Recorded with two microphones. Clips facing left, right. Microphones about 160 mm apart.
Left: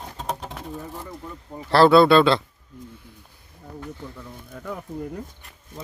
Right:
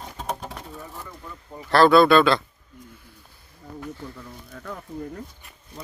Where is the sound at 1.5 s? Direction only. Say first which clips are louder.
Left 1 dB; 25° left (ahead or behind).